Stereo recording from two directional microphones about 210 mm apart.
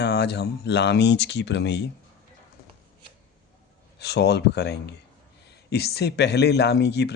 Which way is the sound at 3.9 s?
50° left (ahead or behind).